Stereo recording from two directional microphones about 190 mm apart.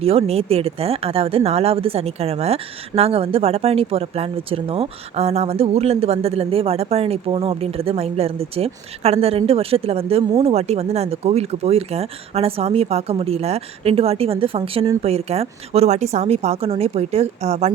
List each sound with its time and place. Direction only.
0.0 s speech: 30° right (ahead or behind)